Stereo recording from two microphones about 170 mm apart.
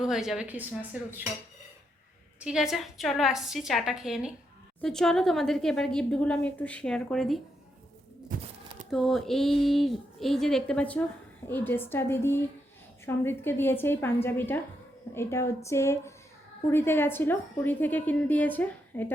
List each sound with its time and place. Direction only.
0.0 s speech: 5° right (ahead or behind)
2.4 s a woman's voice: 5° right (ahead or behind)
8.3 s speech: 55° right (ahead or behind)
8.9 s a woman's voice: centre (ahead or behind)